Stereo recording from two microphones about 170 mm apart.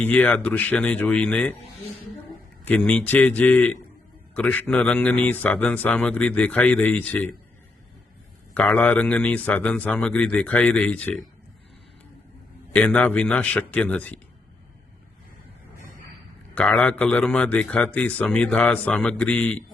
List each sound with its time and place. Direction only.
0.0 s speech: 10° left (ahead or behind)
2.6 s speech: 10° left (ahead or behind)
8.5 s speech: 10° left (ahead or behind)
12.7 s speech: 10° left (ahead or behind)
16.6 s speech: 5° left (ahead or behind)